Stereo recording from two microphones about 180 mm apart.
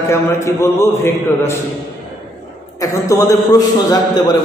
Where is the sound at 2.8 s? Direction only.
15° left (ahead or behind).